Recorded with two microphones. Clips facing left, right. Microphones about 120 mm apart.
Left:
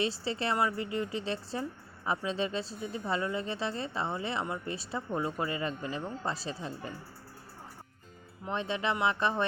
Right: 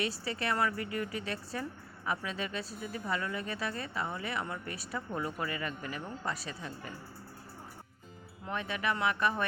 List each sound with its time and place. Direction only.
0.0 s speech: 30° left (ahead or behind)
8.4 s speech: 25° left (ahead or behind)